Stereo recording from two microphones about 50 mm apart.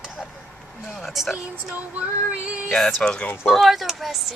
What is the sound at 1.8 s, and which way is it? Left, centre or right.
Female singing, right.